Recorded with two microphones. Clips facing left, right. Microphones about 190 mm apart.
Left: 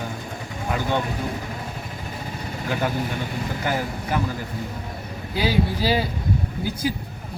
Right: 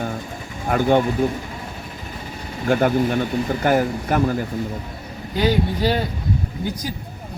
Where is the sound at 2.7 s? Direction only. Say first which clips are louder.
Right 8 dB; 50° right (ahead or behind).